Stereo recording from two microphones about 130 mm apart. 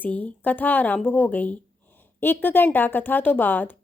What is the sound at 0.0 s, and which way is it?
A woman's voice, 10° left (ahead or behind).